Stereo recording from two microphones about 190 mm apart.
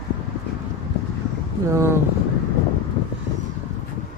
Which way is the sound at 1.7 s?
15° right (ahead or behind).